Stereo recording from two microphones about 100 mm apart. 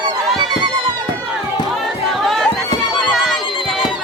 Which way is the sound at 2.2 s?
Centre (ahead or behind).